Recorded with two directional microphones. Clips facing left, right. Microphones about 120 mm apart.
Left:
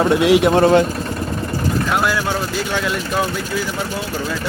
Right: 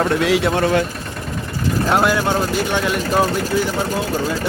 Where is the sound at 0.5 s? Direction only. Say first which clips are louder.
Left 5 dB; 30° left (ahead or behind).